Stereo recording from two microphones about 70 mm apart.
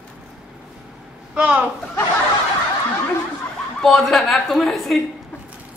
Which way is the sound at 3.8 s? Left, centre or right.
Centre.